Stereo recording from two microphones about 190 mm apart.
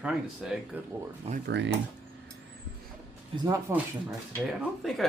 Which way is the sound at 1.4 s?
65° right (ahead or behind).